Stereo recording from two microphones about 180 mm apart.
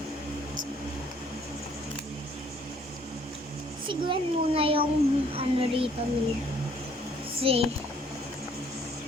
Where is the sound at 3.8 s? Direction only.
30° right (ahead or behind).